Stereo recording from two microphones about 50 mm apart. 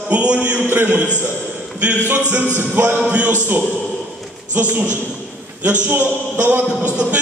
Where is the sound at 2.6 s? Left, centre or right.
Right.